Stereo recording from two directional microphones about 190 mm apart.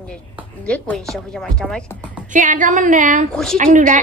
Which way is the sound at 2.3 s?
40° right (ahead or behind).